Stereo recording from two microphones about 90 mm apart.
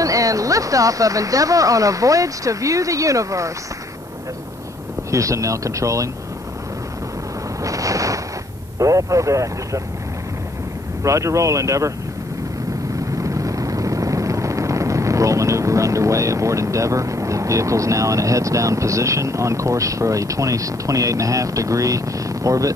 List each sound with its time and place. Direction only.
0.0 s speech: 40° right (ahead or behind)
5.1 s speech: 35° right (ahead or behind)
7.6 s a sound: 40° right (ahead or behind)
8.7 s speech: 35° right (ahead or behind)
11.1 s speech: 35° right (ahead or behind)
13.2 s vehicle: 35° right (ahead or behind)